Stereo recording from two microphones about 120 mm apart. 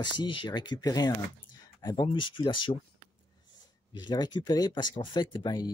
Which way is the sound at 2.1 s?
45° left (ahead or behind).